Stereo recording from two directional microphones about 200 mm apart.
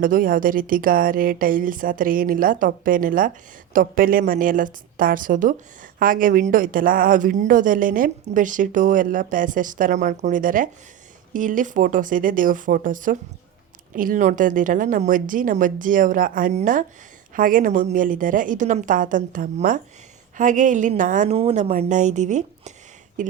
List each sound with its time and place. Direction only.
0.0 s a woman's voice: 45° right (ahead or behind)